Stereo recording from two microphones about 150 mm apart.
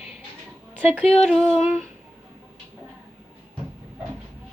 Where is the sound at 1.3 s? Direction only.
Centre (ahead or behind).